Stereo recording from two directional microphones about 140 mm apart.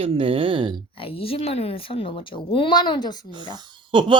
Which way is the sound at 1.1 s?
45° left (ahead or behind).